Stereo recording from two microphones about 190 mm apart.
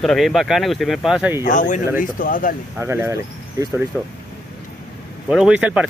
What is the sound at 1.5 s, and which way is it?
Speech, 40° left (ahead or behind).